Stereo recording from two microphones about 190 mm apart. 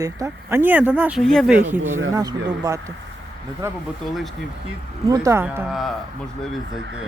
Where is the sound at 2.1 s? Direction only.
20° right (ahead or behind).